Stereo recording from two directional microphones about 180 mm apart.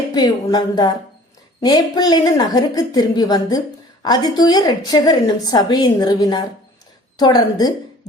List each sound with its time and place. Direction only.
0.1 s a woman's voice: 20° left (ahead or behind)